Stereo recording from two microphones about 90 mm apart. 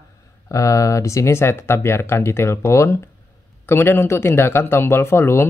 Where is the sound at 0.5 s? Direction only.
35° left (ahead or behind).